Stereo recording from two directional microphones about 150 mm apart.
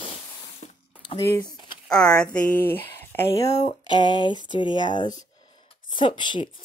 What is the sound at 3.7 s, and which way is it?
Speech, 30° left (ahead or behind).